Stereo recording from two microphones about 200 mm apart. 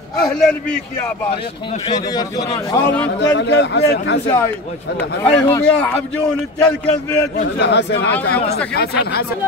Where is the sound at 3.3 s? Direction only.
60° left (ahead or behind).